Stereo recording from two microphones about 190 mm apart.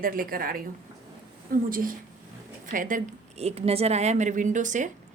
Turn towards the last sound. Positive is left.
turn(degrees=-40)  # may be behind; listen again after turning